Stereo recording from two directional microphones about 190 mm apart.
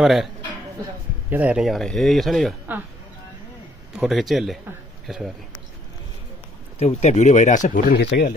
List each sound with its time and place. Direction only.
0.0 s speech: centre (ahead or behind)
1.3 s speech: 5° right (ahead or behind)
3.9 s speech: 5° right (ahead or behind)
6.8 s speech: 35° left (ahead or behind)
8.0 s speech: 60° left (ahead or behind)